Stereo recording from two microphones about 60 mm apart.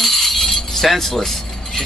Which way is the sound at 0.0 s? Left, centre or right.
Centre.